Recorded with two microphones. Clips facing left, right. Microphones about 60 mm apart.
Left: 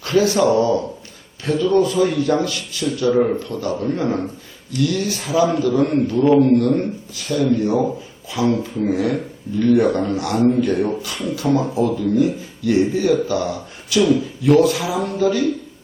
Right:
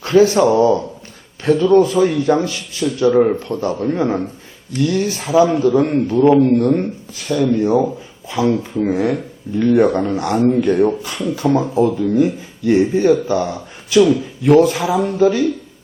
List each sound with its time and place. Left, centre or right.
0.0 s speech: right